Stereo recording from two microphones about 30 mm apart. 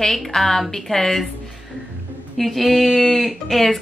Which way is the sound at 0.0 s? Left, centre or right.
Centre.